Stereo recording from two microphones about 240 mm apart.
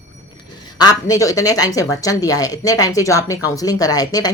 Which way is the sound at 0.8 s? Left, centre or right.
Centre.